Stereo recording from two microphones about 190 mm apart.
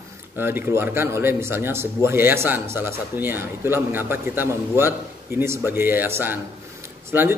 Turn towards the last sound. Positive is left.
turn(degrees=-15)  # may be behind; listen again after turning